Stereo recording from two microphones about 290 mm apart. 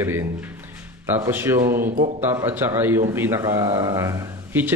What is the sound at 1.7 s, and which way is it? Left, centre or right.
Speech, right.